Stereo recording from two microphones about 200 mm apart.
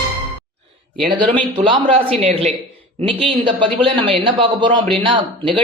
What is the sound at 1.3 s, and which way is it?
Speech, 25° right (ahead or behind).